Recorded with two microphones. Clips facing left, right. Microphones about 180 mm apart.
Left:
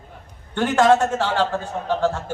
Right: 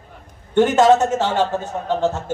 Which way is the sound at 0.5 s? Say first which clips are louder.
Right 3 dB; 20° right (ahead or behind).